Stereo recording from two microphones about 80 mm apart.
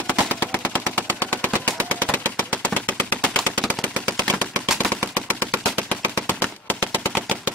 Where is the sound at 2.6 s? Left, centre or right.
Left.